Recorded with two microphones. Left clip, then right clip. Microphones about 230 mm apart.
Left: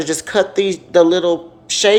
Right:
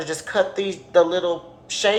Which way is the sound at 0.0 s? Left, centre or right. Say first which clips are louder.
Left 5 dB; left.